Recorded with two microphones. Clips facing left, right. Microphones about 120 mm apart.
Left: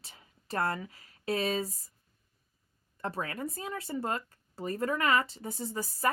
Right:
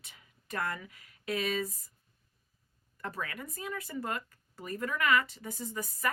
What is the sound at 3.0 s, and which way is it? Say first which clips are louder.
Speech: left 4 dB; 30° left (ahead or behind).